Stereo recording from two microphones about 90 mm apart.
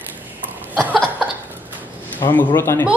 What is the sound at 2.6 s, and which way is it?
Speech, 25° left (ahead or behind).